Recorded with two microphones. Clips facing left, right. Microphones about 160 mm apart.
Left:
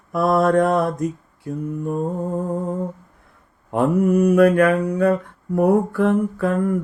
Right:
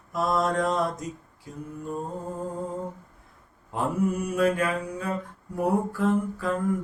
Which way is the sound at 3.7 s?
60° left (ahead or behind).